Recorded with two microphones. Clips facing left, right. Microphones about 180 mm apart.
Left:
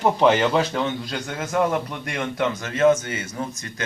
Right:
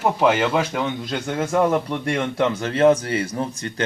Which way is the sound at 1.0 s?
25° right (ahead or behind).